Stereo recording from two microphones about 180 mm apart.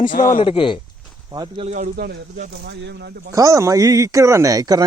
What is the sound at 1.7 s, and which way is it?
Speech, 40° right (ahead or behind).